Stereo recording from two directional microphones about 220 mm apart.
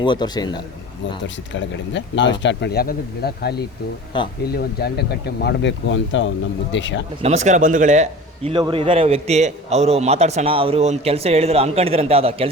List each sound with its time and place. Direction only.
0.0 s a man's voice: 20° left (ahead or behind)
1.2 s speech: 55° left (ahead or behind)
4.1 s a man's voice: 20° left (ahead or behind)
4.5 s speech: 45° left (ahead or behind)
7.2 s a man's voice: 30° right (ahead or behind)